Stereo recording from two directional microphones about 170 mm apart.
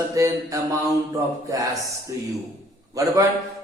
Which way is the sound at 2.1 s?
20° right (ahead or behind).